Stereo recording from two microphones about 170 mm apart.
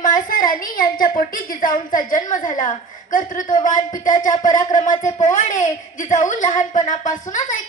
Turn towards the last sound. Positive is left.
turn(degrees=50)  # may be behind; listen again after turning